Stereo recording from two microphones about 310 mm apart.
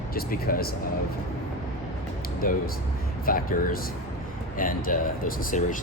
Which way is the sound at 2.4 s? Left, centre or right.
Left.